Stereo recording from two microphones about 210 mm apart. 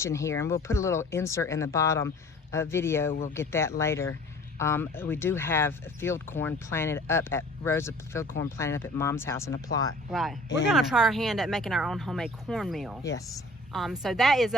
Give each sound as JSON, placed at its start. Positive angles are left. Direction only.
{"t": 0.0, "sound": "speech", "side_deg": 15}
{"t": 3.1, "sound": "speech", "side_deg": 40}
{"t": 3.3, "sound": "speech", "side_deg": 10}
{"t": 10.1, "sound": "speech", "side_deg": 0}
{"t": 13.0, "sound": "speech", "side_deg": 15}
{"t": 13.7, "sound": "speech", "side_deg": 0}